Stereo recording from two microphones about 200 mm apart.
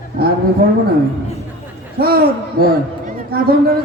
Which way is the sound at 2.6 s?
50° right (ahead or behind).